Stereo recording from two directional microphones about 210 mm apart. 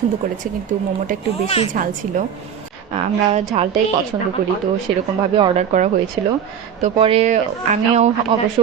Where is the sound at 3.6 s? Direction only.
30° right (ahead or behind).